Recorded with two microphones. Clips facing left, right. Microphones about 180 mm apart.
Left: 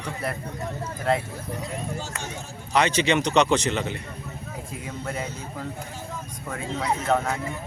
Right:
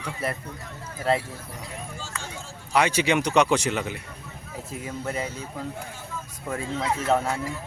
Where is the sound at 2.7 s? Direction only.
10° right (ahead or behind).